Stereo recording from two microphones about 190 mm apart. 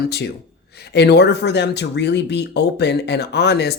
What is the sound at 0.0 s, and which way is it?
Speech, 55° left (ahead or behind).